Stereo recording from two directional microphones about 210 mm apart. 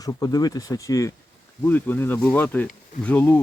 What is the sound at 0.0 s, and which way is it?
Rub, 15° left (ahead or behind).